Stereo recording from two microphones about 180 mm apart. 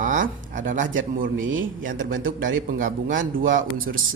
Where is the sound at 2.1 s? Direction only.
90° right.